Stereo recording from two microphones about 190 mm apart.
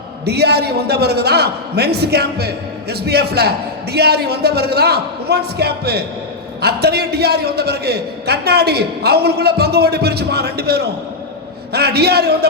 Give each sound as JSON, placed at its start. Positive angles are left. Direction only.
{"t": 0.3, "sound": "a man's voice", "side_deg": -60}